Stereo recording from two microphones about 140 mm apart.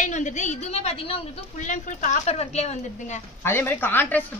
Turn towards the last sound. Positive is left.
turn(degrees=15)  # may be behind; listen again after turning